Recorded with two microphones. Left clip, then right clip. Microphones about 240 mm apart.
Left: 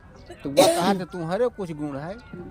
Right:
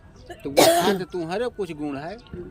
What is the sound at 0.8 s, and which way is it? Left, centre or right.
Speech, left.